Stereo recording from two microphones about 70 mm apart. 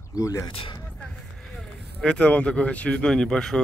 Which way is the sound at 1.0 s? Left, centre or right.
Centre.